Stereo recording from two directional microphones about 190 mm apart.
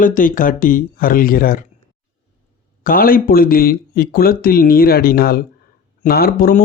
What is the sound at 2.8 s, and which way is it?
Speech, 50° left (ahead or behind).